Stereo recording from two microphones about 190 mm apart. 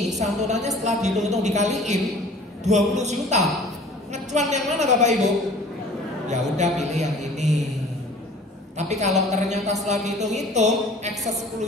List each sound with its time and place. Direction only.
0.1 s a woman's voice: 40° right (ahead or behind)
8.7 s a man's voice: 35° right (ahead or behind)